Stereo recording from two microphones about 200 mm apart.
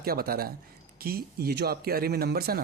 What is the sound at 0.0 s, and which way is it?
Speech, 50° right (ahead or behind).